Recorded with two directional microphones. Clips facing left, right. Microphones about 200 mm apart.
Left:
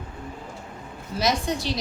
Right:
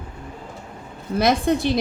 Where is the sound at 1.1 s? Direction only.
55° right (ahead or behind).